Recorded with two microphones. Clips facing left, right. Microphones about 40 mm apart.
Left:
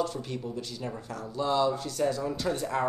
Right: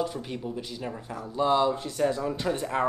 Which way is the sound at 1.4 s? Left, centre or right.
Right.